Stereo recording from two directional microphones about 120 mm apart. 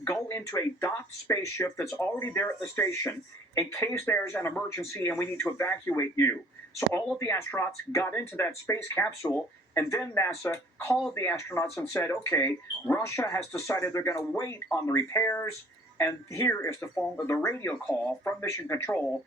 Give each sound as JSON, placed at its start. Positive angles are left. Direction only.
{"t": 0.0, "sound": "speech", "side_deg": 20}